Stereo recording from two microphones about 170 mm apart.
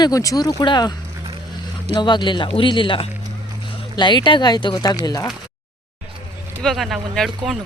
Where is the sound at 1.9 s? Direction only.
25° left (ahead or behind).